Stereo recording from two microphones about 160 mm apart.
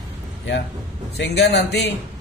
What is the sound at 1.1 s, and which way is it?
Speech, 90° left.